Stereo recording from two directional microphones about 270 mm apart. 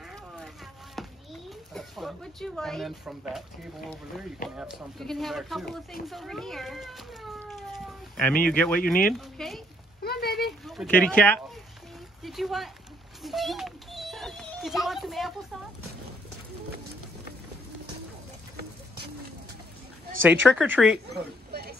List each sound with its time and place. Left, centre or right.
0.9 s speech: centre
7.4 s cat: centre
8.5 s speech: centre
10.0 s a sound: left
10.6 s speech: centre
13.2 s children playing: centre
20.4 s speech: centre
21.1 s a sound: right